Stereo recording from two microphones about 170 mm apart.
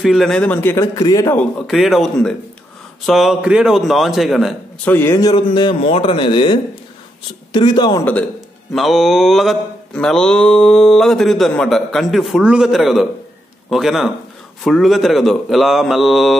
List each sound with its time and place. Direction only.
0.0 s a man's voice: centre (ahead or behind)
1.7 s mantra: centre (ahead or behind)
4.8 s a man's voice: 15° left (ahead or behind)
5.3 s a man's voice: 30° left (ahead or behind)
8.0 s a man's voice: 10° left (ahead or behind)
8.7 s mantra: centre (ahead or behind)